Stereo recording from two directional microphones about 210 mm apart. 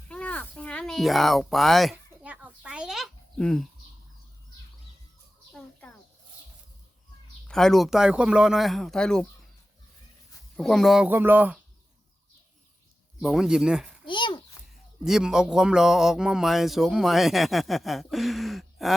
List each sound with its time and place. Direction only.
0.1 s a sound: 5° left (ahead or behind)
5.5 s chicken: 5° left (ahead or behind)
7.4 s speech: centre (ahead or behind)
10.6 s speech: centre (ahead or behind)
13.1 s speech: centre (ahead or behind)
14.1 s a sound: 20° left (ahead or behind)
15.0 s speech: 5° right (ahead or behind)